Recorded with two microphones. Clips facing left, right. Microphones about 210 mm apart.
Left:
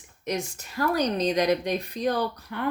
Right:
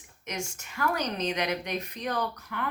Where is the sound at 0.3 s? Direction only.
35° left (ahead or behind).